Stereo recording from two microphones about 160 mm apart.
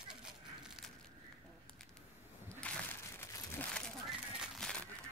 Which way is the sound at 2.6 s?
10° left (ahead or behind).